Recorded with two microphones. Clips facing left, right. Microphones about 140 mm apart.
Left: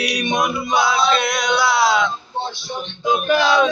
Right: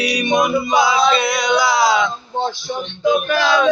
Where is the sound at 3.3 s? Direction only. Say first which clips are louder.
Left 1 dB; 20° left (ahead or behind).